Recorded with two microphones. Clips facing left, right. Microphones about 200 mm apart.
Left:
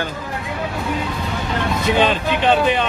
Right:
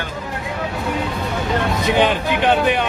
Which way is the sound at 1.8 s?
15° right (ahead or behind).